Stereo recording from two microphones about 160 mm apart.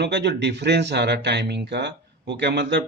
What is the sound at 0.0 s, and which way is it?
A man's voice, 90° right.